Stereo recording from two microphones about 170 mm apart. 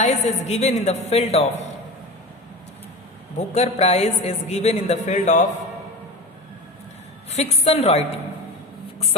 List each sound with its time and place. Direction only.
0.0 s a woman's voice: 40° left (ahead or behind)
3.3 s a woman's voice: 40° left (ahead or behind)
7.3 s a woman's voice: 40° left (ahead or behind)